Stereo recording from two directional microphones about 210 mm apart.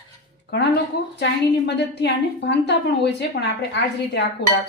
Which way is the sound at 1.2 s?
55° left (ahead or behind).